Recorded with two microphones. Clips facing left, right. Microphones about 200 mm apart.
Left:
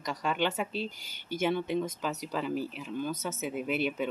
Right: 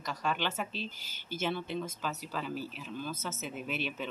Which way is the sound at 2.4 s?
60° left (ahead or behind).